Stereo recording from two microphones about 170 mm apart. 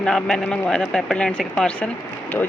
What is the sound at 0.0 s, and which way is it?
Speech, 5° left (ahead or behind).